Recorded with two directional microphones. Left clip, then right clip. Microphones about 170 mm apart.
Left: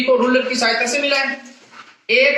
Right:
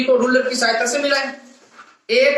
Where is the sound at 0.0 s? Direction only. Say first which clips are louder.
Even; 25° left (ahead or behind).